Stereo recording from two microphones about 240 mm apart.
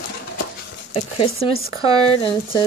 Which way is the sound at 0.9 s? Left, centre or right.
Left.